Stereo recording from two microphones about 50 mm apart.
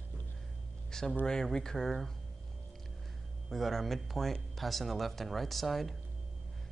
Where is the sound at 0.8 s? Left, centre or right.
Centre.